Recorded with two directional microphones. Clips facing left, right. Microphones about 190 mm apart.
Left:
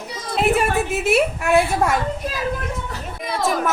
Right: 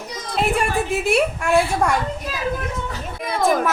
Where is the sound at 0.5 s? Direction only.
Centre (ahead or behind).